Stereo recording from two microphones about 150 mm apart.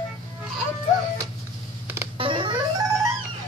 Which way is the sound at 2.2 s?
35° right (ahead or behind).